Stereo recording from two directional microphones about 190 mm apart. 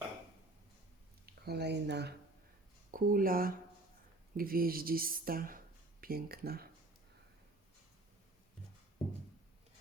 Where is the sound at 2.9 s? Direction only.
50° right (ahead or behind).